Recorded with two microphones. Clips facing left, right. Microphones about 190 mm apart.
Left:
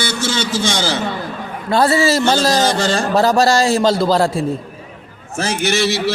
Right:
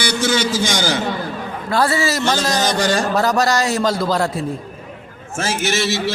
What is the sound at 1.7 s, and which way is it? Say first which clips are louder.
A man's voice: left 4 dB; 25° left (ahead or behind).